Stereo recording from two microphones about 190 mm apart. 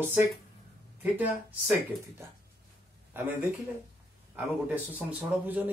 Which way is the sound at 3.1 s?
10° right (ahead or behind).